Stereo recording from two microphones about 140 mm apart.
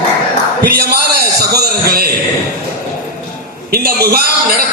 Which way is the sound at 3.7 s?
90° right.